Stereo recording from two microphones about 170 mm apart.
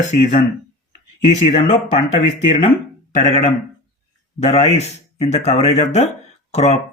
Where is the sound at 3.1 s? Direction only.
40° left (ahead or behind).